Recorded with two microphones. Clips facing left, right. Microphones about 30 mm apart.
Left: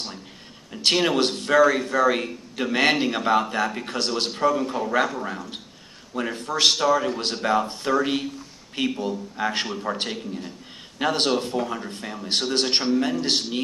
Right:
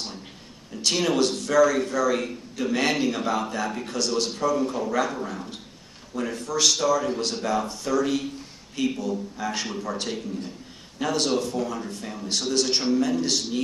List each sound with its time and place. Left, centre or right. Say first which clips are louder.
0.8 s a man's voice: left 2 dB; left